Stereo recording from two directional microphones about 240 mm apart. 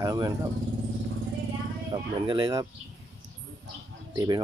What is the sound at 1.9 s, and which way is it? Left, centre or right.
Speech, centre.